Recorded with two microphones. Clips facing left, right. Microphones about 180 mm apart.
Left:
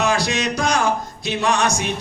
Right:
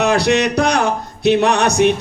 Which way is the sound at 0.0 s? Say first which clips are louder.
Right 6 dB; 60° right (ahead or behind).